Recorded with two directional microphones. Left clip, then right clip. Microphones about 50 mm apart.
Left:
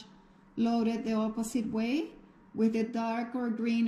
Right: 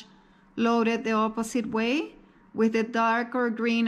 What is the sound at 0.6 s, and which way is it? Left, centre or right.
Speech, left.